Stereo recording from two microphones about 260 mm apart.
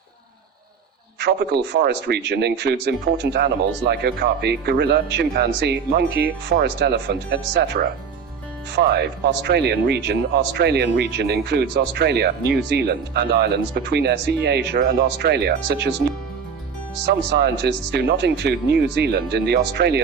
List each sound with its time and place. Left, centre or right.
1.2 s speech: right
17.1 s speech: right